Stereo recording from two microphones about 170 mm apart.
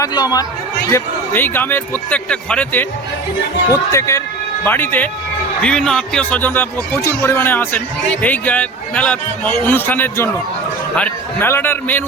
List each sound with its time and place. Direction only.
0.0 s speech: 25° left (ahead or behind)
0.9 s a man's voice: 15° left (ahead or behind)
3.7 s a man's voice: 15° left (ahead or behind)